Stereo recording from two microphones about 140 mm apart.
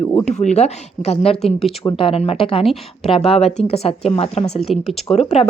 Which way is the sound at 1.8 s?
35° left (ahead or behind).